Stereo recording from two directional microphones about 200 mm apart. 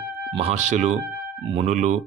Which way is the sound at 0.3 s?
35° right (ahead or behind).